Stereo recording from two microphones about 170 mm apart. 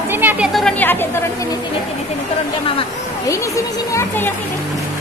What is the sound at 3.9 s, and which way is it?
Speech, 15° left (ahead or behind).